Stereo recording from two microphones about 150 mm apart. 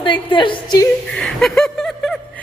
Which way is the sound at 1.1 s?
5° left (ahead or behind).